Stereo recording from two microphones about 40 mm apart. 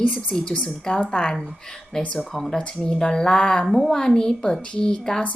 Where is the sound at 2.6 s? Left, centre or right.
Left.